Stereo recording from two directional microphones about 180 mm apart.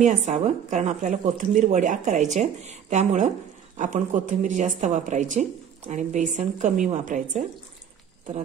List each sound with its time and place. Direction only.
0.0 s speech: 40° right (ahead or behind)